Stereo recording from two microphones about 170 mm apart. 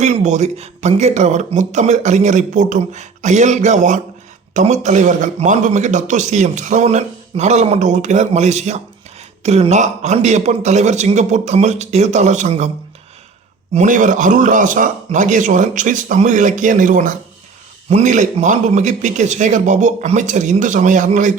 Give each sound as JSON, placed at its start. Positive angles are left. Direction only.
{"t": 0.0, "sound": "a man's voice", "side_deg": -45}
{"t": 13.7, "sound": "a man's voice", "side_deg": -50}